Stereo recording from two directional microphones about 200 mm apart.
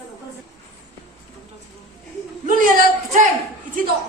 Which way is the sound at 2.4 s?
40° right (ahead or behind).